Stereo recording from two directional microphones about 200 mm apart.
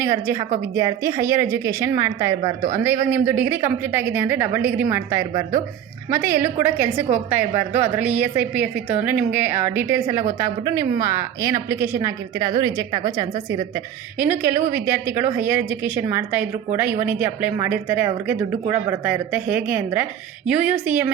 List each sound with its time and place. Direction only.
0.0 s a woman's voice: 15° right (ahead or behind)